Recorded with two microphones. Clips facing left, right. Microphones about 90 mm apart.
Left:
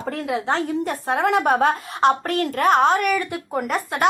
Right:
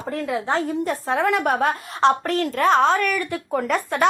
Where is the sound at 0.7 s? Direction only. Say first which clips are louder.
Even; 65° left (ahead or behind).